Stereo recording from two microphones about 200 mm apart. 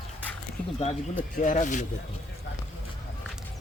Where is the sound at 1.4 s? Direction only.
40° left (ahead or behind).